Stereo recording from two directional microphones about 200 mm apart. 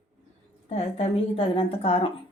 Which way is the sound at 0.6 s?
30° left (ahead or behind).